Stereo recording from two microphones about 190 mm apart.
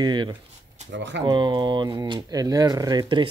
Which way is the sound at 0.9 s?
70° right (ahead or behind).